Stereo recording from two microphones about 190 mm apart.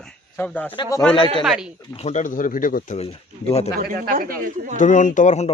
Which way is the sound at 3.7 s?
50° right (ahead or behind).